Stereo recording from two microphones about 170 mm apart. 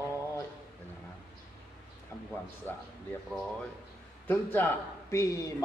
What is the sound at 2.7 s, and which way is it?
Speech, 10° left (ahead or behind).